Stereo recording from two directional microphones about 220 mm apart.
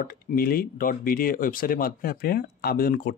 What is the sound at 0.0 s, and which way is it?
Speech, 40° left (ahead or behind).